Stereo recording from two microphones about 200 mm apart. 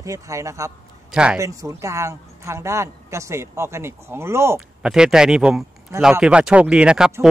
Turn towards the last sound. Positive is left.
turn(degrees=-5)  # may be behind; listen again after turning